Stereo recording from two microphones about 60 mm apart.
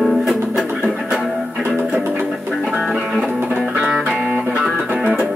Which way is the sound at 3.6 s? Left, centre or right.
Centre.